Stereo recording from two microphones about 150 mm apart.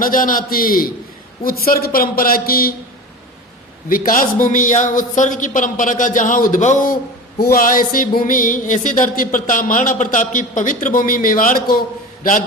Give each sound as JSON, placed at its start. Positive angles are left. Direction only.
{"t": 0.0, "sound": "a man's voice", "side_deg": 65}
{"t": 3.8, "sound": "a man's voice", "side_deg": 70}